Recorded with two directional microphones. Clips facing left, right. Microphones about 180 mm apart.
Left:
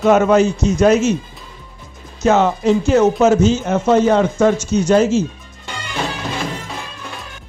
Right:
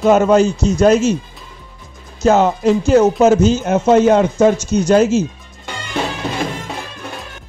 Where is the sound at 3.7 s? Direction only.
20° right (ahead or behind).